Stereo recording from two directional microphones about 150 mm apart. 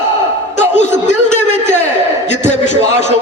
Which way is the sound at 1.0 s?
50° left (ahead or behind).